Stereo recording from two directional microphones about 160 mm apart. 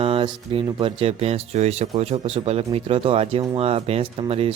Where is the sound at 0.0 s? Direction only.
35° right (ahead or behind).